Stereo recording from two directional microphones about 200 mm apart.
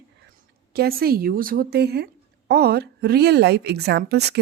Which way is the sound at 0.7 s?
50° right (ahead or behind).